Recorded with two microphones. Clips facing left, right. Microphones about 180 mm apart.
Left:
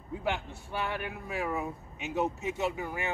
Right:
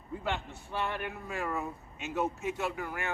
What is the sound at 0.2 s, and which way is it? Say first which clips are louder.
Speech: left 3 dB; 5° left (ahead or behind).